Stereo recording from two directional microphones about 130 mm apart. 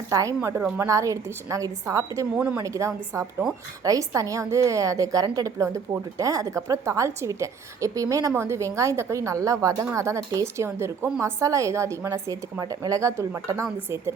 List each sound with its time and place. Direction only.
0.1 s a woman's voice: 25° right (ahead or behind)